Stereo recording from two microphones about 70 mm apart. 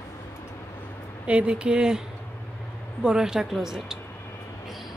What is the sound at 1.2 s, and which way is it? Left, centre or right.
Speech, centre.